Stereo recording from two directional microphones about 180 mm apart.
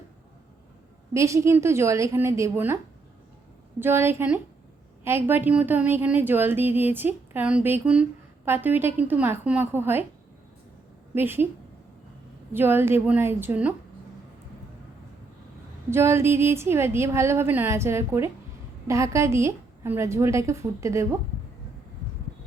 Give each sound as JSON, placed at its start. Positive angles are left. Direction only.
{"t": 1.1, "sound": "a woman's voice", "side_deg": -15}
{"t": 3.8, "sound": "a woman's voice", "side_deg": -10}
{"t": 11.1, "sound": "a woman's voice", "side_deg": -10}
{"t": 12.5, "sound": "a woman's voice", "side_deg": -10}
{"t": 15.9, "sound": "a woman's voice", "side_deg": -15}